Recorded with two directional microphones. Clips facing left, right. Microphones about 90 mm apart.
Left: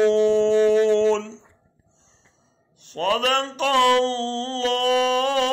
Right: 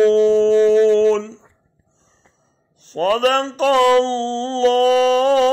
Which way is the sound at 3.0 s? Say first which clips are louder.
Right 5 dB; 40° right (ahead or behind).